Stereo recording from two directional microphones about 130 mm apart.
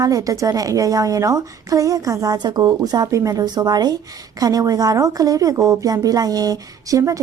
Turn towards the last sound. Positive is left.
turn(degrees=-25)  # may be behind; listen again after turning